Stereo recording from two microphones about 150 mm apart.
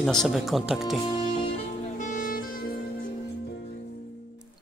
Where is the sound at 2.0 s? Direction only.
60° left (ahead or behind).